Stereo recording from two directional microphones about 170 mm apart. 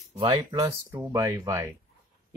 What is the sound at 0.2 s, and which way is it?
Speech, 30° right (ahead or behind).